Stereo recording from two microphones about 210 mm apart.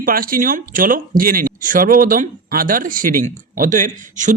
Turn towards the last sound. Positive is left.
turn(degrees=-35)  # may be behind; listen again after turning